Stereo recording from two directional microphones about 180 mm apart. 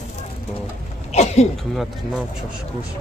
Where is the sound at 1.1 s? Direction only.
35° left (ahead or behind).